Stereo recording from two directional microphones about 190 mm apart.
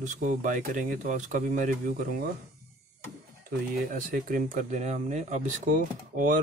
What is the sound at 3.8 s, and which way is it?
Speech, 45° right (ahead or behind).